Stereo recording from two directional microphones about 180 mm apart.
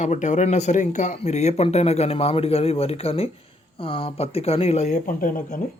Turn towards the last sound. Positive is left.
turn(degrees=50)  # may be behind; listen again after turning